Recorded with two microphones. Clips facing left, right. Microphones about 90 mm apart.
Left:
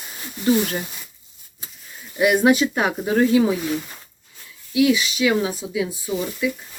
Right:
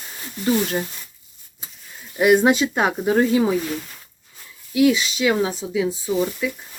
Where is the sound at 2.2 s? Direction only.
30° right (ahead or behind).